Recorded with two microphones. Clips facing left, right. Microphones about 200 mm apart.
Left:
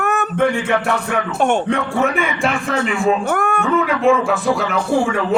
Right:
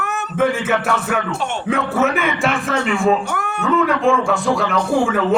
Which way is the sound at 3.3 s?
50° left (ahead or behind).